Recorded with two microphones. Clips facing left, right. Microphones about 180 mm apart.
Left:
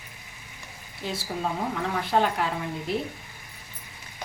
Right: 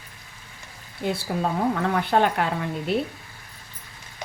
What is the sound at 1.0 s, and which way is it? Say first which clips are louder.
Speech: right 5 dB; 60° right (ahead or behind).